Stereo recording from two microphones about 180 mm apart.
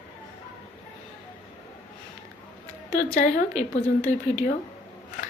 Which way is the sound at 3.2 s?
40° left (ahead or behind).